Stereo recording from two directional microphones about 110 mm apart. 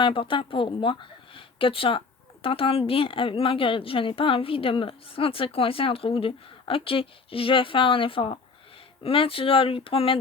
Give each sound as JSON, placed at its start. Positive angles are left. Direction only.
{"t": 0.0, "sound": "speech", "side_deg": 50}